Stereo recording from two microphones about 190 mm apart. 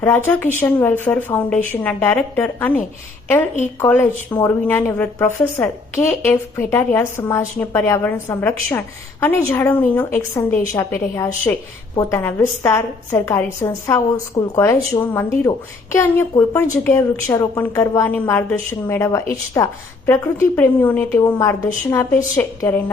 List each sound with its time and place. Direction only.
0.0 s a woman's voice: 10° left (ahead or behind)